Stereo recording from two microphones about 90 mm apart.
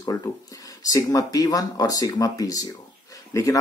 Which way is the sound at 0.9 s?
45° left (ahead or behind).